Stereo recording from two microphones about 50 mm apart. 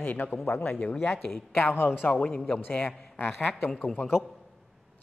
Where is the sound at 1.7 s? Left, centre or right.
Left.